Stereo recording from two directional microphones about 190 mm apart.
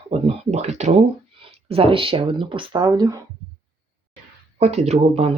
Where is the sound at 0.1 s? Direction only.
35° right (ahead or behind).